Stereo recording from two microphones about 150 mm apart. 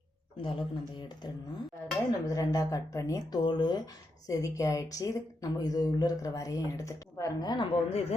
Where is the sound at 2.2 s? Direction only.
25° left (ahead or behind).